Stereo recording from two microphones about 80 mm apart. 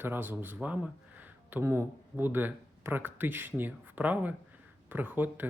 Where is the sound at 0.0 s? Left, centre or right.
Right.